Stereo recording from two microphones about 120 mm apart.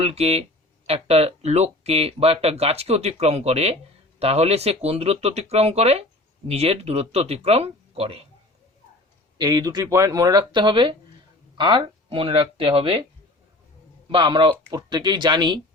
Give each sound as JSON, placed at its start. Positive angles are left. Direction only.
{"t": 0.0, "sound": "speech", "side_deg": -60}
{"t": 9.4, "sound": "speech", "side_deg": -35}
{"t": 14.1, "sound": "speech", "side_deg": -45}